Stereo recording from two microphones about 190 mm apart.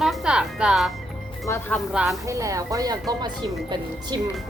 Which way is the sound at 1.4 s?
15° left (ahead or behind).